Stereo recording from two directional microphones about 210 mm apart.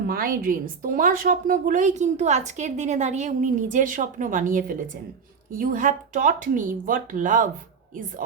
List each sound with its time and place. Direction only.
0.1 s a woman's voice: 45° right (ahead or behind)